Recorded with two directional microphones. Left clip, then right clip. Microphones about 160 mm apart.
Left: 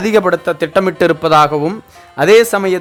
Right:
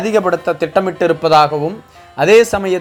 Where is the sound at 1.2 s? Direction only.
25° left (ahead or behind).